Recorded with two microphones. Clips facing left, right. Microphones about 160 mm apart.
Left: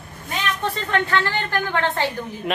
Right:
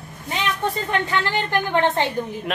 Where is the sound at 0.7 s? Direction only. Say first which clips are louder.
Left 1 dB; 15° right (ahead or behind).